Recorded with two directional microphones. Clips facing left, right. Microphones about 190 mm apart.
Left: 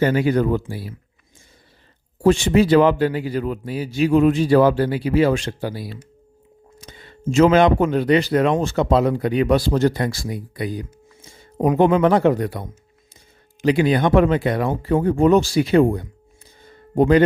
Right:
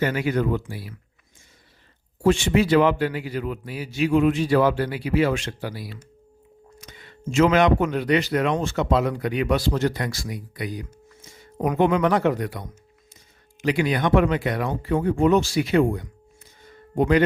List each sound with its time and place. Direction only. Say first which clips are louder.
0.0 s speech: left 5 dB; 30° left (ahead or behind)
2.2 s speech: left 4 dB; 40° left (ahead or behind)
16.6 s a sound: left 5 dB; 30° left (ahead or behind)